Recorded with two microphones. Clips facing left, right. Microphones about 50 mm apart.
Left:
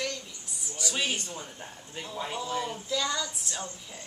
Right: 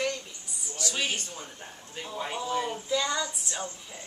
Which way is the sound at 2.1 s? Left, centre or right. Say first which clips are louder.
Right 2 dB; centre.